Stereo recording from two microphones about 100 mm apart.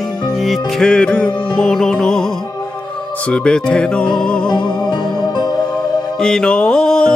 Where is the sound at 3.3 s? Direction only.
10° left (ahead or behind).